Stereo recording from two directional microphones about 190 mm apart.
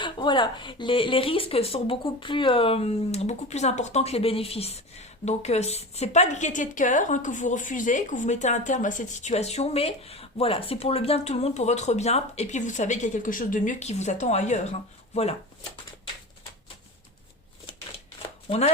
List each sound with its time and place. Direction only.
0.0 s speech: 25° left (ahead or behind)
18.4 s speech: 30° left (ahead or behind)